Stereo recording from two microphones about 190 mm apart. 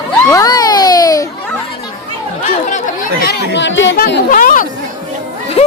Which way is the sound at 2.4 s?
35° left (ahead or behind).